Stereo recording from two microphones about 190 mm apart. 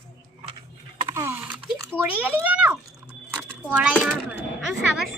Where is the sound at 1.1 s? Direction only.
15° right (ahead or behind).